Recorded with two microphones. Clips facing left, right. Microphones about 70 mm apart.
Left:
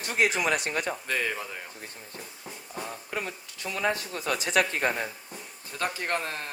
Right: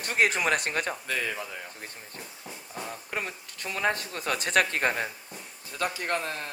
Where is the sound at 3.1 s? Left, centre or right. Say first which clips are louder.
Right 1 dB; right.